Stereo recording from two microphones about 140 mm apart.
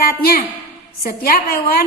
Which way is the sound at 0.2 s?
90° left.